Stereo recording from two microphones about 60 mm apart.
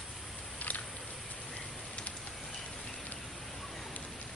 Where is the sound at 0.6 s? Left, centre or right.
Left.